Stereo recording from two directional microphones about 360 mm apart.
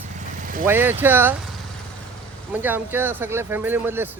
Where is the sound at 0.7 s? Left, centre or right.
Centre.